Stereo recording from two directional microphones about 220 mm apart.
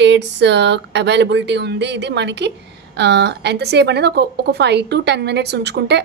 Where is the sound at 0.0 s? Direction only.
50° right (ahead or behind).